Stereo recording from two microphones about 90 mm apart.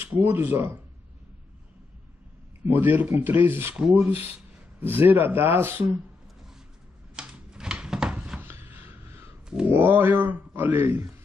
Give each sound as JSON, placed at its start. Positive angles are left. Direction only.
{"t": 0.0, "sound": "speech", "side_deg": -20}
{"t": 2.7, "sound": "speech", "side_deg": -20}
{"t": 7.2, "sound": "a sound", "side_deg": -10}
{"t": 9.5, "sound": "speech", "side_deg": -10}